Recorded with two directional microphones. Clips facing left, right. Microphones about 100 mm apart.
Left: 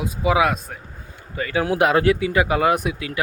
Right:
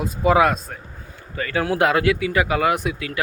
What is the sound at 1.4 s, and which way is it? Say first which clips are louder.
Speech: left 1 dB; 15° left (ahead or behind).